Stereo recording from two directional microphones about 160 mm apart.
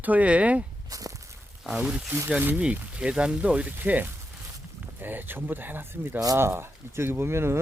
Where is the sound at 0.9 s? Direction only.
20° right (ahead or behind).